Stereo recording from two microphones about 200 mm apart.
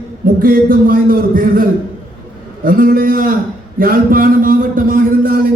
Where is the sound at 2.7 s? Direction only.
45° right (ahead or behind).